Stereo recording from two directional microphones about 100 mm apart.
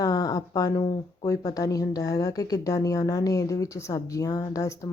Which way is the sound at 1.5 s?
35° left (ahead or behind).